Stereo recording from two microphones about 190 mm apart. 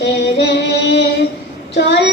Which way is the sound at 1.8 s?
65° left (ahead or behind).